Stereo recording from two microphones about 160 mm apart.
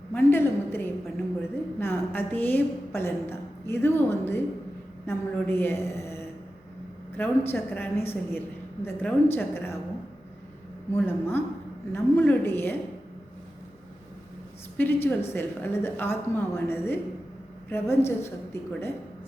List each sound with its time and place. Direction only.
0.1 s a sound: 15° left (ahead or behind)
1.4 s a woman's voice: 15° left (ahead or behind)
10.9 s a woman's voice: 15° left (ahead or behind)
14.8 s a woman's voice: 15° left (ahead or behind)